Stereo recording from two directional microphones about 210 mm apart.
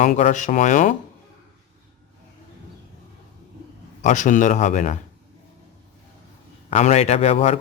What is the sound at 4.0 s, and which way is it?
A man's voice, 35° left (ahead or behind).